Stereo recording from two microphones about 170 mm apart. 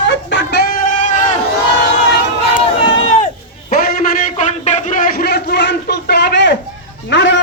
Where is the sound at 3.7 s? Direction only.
55° left (ahead or behind); by 7.4 s 90° left.